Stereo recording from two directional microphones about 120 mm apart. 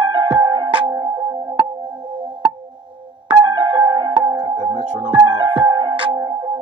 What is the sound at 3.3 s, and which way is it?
Music, 35° right (ahead or behind).